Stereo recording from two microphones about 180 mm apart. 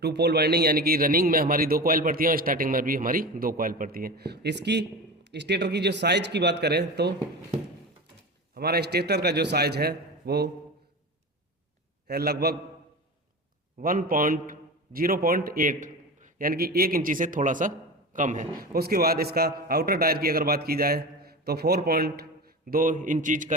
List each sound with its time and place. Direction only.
0.0 s a man's voice: 70° right (ahead or behind)
8.5 s a man's voice: 60° right (ahead or behind)
12.0 s a man's voice: 60° right (ahead or behind)
13.7 s a man's voice: 50° right (ahead or behind)
18.6 s a man's voice: 55° right (ahead or behind)